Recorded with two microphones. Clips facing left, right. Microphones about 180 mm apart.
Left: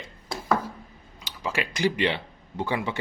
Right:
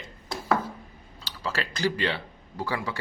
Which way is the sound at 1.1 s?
15° left (ahead or behind).